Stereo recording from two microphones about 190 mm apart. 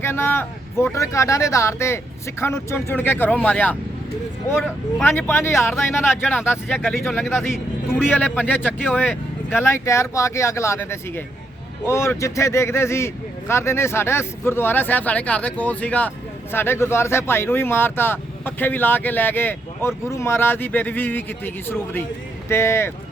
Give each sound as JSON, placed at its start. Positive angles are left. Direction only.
{"t": 0.0, "sound": "speech", "side_deg": 10}
{"t": 5.0, "sound": "speech", "side_deg": 10}
{"t": 7.9, "sound": "speech", "side_deg": 10}
{"t": 8.6, "sound": "speech", "side_deg": -5}
{"t": 9.0, "sound": "speech", "side_deg": 10}